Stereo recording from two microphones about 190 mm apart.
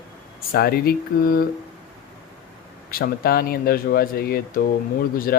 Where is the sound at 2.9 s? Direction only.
55° left (ahead or behind).